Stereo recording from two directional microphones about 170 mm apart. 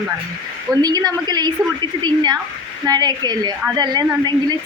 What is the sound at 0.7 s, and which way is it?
A woman's voice, 25° right (ahead or behind).